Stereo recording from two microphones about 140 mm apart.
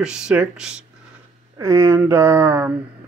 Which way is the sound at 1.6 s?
20° right (ahead or behind).